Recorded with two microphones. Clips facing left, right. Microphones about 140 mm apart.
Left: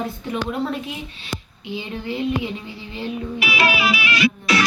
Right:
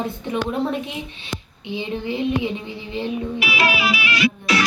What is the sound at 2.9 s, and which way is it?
Music, 15° right (ahead or behind).